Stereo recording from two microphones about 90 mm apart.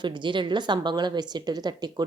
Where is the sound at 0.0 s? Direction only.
60° right (ahead or behind).